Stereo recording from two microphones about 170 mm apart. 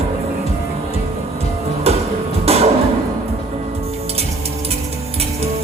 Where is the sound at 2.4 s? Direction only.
35° right (ahead or behind).